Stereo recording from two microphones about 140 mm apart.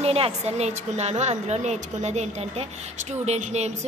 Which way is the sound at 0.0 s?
50° right (ahead or behind).